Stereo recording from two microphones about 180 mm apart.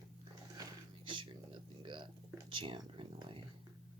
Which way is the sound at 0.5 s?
25° right (ahead or behind).